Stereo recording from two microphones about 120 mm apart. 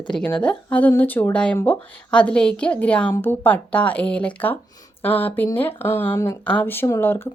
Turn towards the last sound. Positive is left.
turn(degrees=20)  # may be behind; listen again after turning